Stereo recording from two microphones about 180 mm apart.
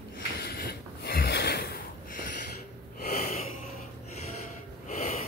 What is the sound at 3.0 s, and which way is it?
Wheeze, 55° left (ahead or behind).